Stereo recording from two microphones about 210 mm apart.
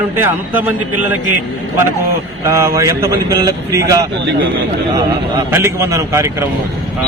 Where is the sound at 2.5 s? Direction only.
15° right (ahead or behind).